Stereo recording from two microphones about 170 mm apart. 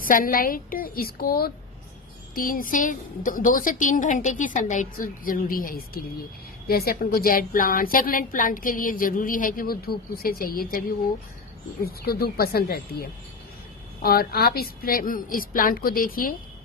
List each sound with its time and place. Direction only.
0.0 s a woman's voice: 55° left (ahead or behind)
11.8 s a woman's voice: 65° left (ahead or behind)